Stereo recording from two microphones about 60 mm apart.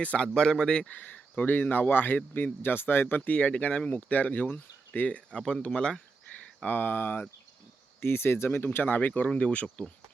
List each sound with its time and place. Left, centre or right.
0.0 s speech: left
0.3 s a man's voice: centre
0.9 s speech: left
3.2 s a man's voice: left
6.7 s speech: left
9.0 s speech: left